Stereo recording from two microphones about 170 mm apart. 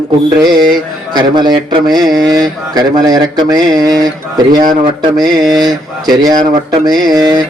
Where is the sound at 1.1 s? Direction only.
25° right (ahead or behind).